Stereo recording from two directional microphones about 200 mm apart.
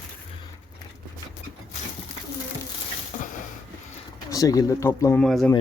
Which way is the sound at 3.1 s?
40° left (ahead or behind).